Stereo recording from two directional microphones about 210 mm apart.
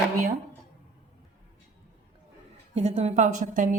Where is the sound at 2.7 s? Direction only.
30° right (ahead or behind).